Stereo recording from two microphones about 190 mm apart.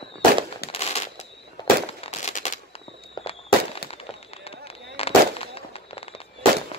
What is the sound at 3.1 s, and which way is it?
Firecracker, 30° left (ahead or behind).